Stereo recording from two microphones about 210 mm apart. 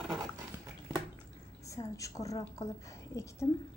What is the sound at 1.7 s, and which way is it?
A woman's voice, 15° left (ahead or behind).